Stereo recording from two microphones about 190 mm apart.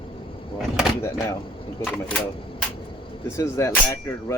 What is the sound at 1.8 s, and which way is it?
Speech, 5° left (ahead or behind).